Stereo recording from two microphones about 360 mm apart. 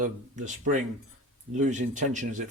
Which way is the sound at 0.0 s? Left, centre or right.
Right.